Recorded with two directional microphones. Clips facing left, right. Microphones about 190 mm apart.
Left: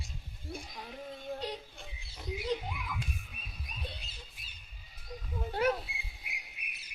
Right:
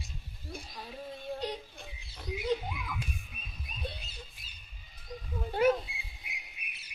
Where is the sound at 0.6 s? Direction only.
15° left (ahead or behind).